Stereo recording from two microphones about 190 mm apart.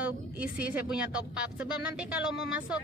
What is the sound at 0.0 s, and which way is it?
A woman's voice, 5° right (ahead or behind).